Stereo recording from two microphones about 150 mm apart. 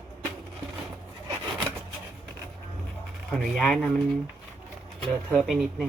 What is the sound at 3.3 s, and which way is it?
Speech, 5° left (ahead or behind).